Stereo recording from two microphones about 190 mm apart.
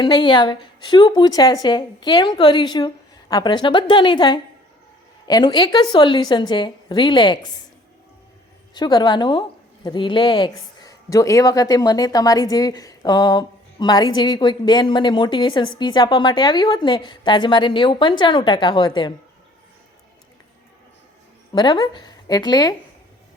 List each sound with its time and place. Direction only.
0.0 s speech: 25° left (ahead or behind)
8.7 s speech: 20° left (ahead or behind)
21.5 s a woman's voice: 20° left (ahead or behind)